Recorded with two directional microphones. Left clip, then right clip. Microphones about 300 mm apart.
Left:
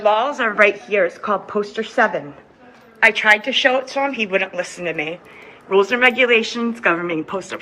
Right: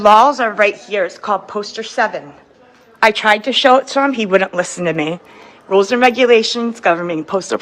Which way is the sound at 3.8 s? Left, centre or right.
Right.